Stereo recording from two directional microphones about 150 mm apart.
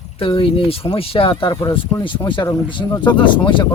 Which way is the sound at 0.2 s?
35° left (ahead or behind).